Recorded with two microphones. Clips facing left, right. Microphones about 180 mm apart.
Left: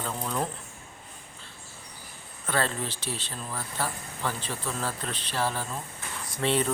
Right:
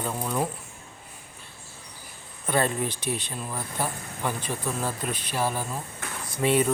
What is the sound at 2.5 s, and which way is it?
A man's voice, 15° right (ahead or behind).